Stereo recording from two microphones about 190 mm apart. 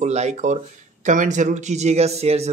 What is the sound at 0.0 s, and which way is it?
Speech, 35° right (ahead or behind).